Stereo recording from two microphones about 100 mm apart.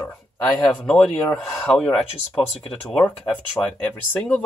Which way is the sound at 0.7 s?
10° left (ahead or behind).